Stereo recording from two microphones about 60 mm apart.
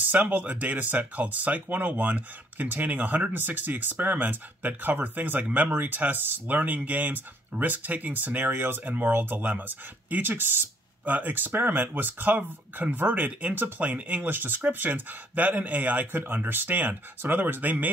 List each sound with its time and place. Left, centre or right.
0.0 s speech: right